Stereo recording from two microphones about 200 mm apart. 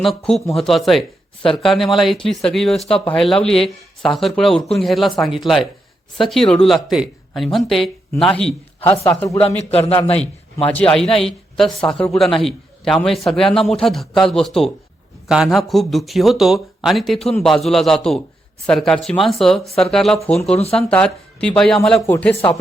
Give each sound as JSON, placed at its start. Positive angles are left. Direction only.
{"t": 0.5, "sound": "a man's voice", "side_deg": 0}
{"t": 8.9, "sound": "speech", "side_deg": 15}
{"t": 9.7, "sound": "a man's voice", "side_deg": 30}
{"t": 10.7, "sound": "a man's voice", "side_deg": 5}